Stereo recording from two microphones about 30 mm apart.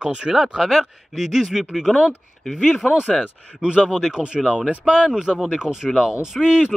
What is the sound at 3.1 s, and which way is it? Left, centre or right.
Speech, centre.